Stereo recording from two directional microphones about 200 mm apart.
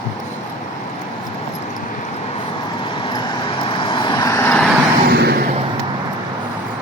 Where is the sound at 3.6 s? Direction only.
25° left (ahead or behind); by 4.7 s 10° left (ahead or behind).